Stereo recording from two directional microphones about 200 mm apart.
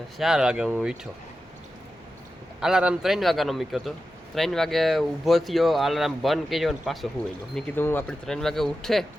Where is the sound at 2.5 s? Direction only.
5° right (ahead or behind).